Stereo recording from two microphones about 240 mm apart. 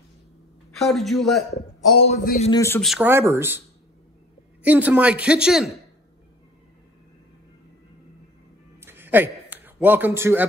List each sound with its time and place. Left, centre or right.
0.7 s speech: centre
1.5 s a man's voice: left
2.5 s speech: centre
2.8 s speech: centre
4.6 s speech: centre
8.8 s a sound: centre